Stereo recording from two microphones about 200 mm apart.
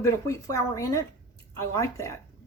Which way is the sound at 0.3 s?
15° left (ahead or behind).